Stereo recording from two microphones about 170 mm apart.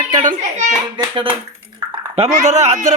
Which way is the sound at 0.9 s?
30° right (ahead or behind).